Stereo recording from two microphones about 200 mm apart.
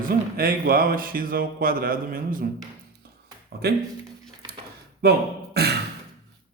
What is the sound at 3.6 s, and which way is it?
Speech, 50° right (ahead or behind).